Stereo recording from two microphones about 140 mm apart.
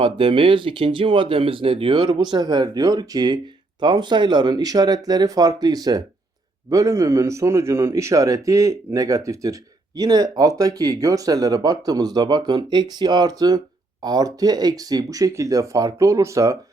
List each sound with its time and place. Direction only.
0.0 s speech: 40° right (ahead or behind); by 16.6 s 25° right (ahead or behind)